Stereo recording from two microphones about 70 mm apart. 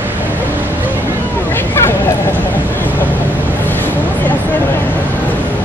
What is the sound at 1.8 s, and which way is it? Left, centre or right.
Vehicle, left.